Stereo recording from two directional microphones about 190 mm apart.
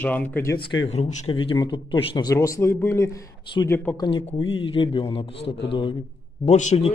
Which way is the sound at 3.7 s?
10° left (ahead or behind).